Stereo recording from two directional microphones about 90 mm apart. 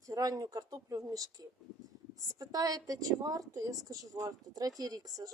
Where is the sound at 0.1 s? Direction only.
40° right (ahead or behind).